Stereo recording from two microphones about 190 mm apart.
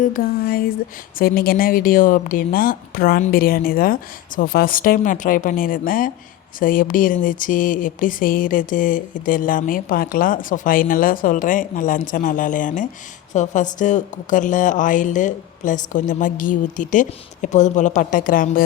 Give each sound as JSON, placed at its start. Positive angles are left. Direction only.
{"t": 0.0, "sound": "a woman's voice", "side_deg": 50}